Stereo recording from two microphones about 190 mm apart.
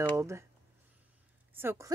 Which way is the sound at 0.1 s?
15° right (ahead or behind).